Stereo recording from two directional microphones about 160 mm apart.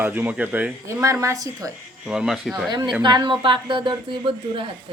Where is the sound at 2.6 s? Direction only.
25° right (ahead or behind).